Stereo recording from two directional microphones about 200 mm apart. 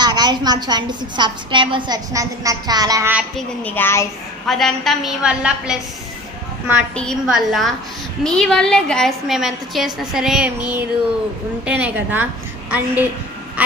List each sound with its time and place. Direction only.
0.0 s a woman's voice: 20° right (ahead or behind)
3.3 s a child's voice: 10° left (ahead or behind)
6.9 s a woman's voice: 5° left (ahead or behind)